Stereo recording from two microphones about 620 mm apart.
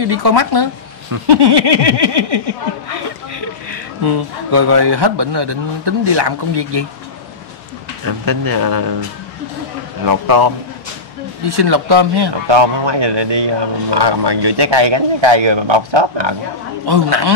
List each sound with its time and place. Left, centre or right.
0.0 s speech: right
8.0 s speech: right
10.0 s speech: right